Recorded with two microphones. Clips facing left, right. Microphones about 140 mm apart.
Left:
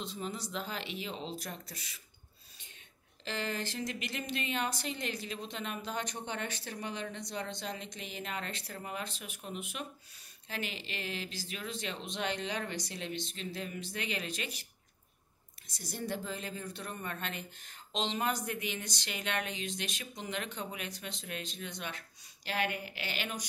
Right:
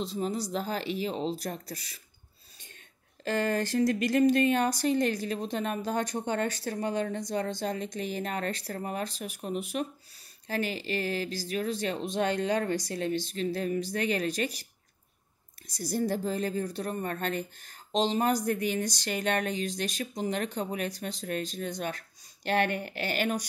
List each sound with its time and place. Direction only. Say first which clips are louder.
0.0 s speech: right 8 dB; 35° right (ahead or behind)
3.3 s speech: right 9 dB; 50° right (ahead or behind)